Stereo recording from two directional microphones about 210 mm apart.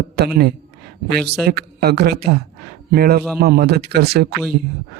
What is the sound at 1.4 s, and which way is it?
Speech, 50° right (ahead or behind).